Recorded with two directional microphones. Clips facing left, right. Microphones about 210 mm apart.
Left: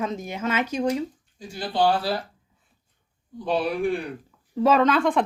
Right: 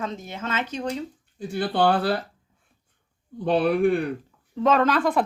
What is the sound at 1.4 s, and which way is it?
Speech, 60° right (ahead or behind).